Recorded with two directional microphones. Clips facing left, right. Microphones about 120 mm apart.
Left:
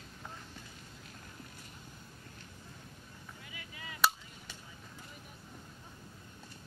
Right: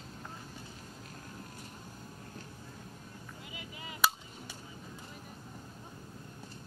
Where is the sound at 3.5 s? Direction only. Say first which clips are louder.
Right 3 dB; 25° right (ahead or behind).